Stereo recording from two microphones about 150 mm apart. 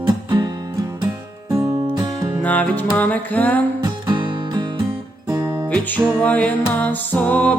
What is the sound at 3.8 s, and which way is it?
Music, 30° right (ahead or behind).